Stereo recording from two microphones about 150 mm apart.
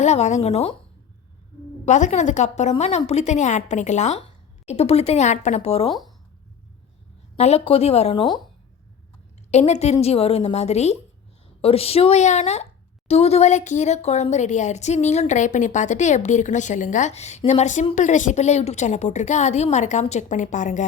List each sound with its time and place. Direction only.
0.0 s speech: 50° left (ahead or behind)
1.8 s speech: 50° left (ahead or behind)
7.3 s speech: 45° left (ahead or behind)
9.5 s speech: 50° left (ahead or behind)